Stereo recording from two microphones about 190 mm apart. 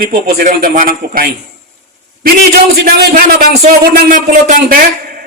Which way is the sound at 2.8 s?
55° right (ahead or behind).